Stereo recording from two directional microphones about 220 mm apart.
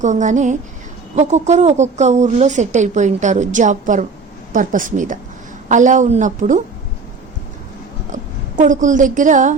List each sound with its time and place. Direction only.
0.0 s speech: 35° right (ahead or behind)
8.1 s a woman's voice: 35° right (ahead or behind)